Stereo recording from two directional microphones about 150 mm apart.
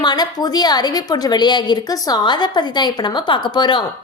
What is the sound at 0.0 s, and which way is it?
A woman's voice, 25° left (ahead or behind).